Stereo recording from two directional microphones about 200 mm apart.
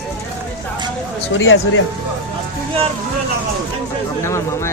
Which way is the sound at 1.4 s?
85° left.